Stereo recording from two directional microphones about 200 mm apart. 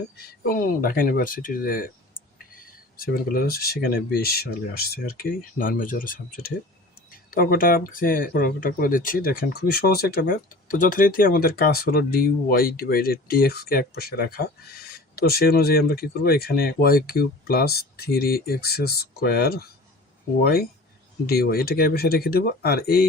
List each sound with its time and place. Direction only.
0.4 s speech: 45° left (ahead or behind)